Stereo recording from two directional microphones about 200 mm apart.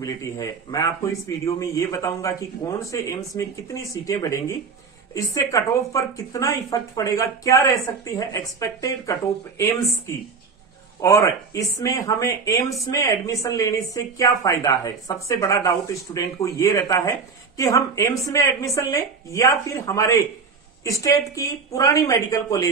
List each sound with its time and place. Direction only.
0.0 s speech: 20° left (ahead or behind)